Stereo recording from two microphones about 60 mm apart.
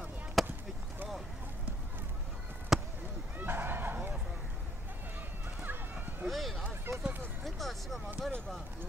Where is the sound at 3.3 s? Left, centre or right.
Right.